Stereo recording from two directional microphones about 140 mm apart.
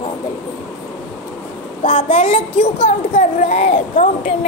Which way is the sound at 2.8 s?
65° left (ahead or behind).